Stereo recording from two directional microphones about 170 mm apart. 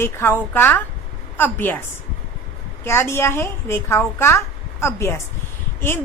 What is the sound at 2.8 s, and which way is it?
A woman's voice, 15° left (ahead or behind).